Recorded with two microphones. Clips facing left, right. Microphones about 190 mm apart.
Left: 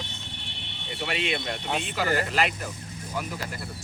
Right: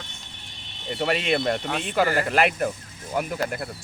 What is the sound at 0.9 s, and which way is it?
Speech, 50° right (ahead or behind).